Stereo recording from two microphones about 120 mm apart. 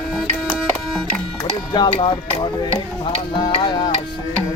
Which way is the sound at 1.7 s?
40° left (ahead or behind).